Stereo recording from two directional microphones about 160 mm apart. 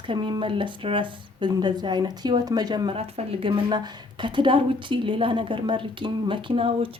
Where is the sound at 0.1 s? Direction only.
30° right (ahead or behind).